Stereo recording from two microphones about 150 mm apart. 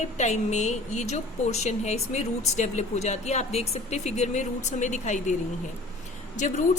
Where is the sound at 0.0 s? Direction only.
50° left (ahead or behind).